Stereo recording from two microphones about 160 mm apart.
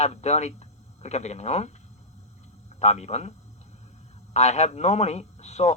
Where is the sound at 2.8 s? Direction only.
45° left (ahead or behind).